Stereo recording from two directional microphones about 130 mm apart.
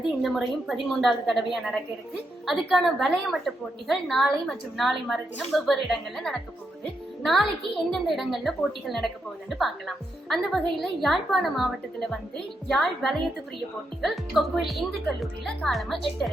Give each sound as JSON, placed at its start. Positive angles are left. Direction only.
{"t": 0.2, "sound": "a woman's voice", "side_deg": 0}